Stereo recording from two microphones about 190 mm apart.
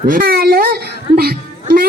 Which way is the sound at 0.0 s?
50° right (ahead or behind).